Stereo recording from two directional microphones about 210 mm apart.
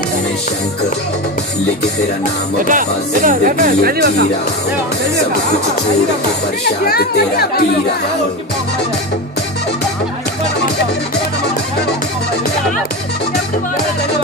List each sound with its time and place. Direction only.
2.6 s speech: 40° right (ahead or behind)
6.8 s speech: 45° left (ahead or behind)